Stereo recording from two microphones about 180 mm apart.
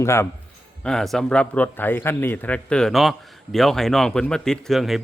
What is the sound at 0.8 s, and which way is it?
Speech, centre (ahead or behind).